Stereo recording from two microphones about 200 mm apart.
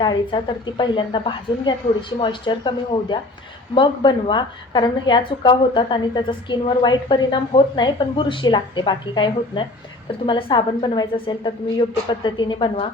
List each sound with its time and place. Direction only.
0.0 s a woman's voice: 25° left (ahead or behind)